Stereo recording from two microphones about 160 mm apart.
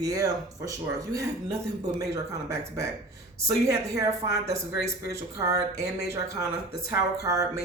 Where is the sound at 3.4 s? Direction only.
20° right (ahead or behind).